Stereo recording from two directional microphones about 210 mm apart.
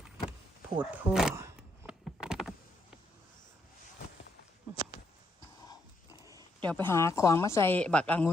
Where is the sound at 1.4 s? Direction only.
10° right (ahead or behind).